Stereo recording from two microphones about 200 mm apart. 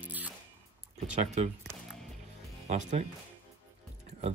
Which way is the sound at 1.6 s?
Centre (ahead or behind).